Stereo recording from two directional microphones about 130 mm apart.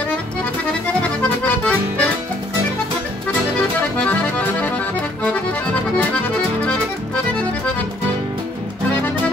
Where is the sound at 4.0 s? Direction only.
10° left (ahead or behind).